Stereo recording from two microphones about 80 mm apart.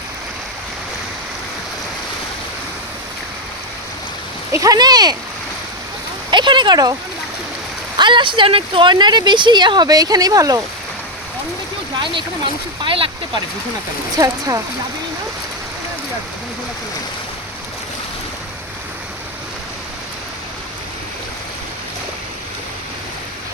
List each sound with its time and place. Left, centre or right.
4.6 s speech: right
6.3 s speech: right
7.9 s speech: right
11.9 s speech: right
12.8 s speech: right
14.2 s speech: right